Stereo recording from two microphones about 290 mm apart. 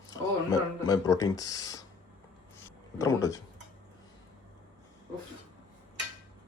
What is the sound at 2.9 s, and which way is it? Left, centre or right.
Speech, centre.